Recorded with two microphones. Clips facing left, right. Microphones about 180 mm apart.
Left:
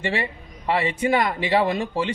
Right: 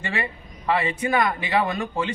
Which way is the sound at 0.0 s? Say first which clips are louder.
Left 3 dB; 30° left (ahead or behind).